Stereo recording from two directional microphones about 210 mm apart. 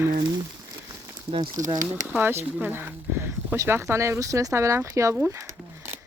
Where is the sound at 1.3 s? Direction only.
20° right (ahead or behind).